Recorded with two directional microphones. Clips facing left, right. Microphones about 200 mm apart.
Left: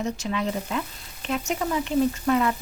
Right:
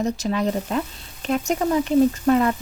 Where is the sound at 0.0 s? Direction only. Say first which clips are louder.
Right 5 dB; 40° right (ahead or behind).